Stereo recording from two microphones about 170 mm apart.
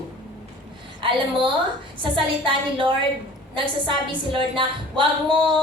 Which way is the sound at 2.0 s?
30° right (ahead or behind).